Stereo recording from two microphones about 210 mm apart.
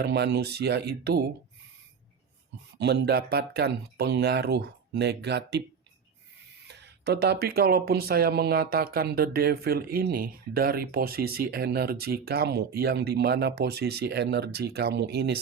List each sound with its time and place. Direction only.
0.0 s speech: 55° right (ahead or behind)
2.7 s speech: 55° right (ahead or behind)
6.7 s speech: 50° right (ahead or behind)